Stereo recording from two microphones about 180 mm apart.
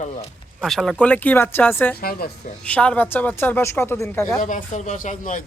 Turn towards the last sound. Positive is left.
turn(degrees=50)  # may be behind; listen again after turning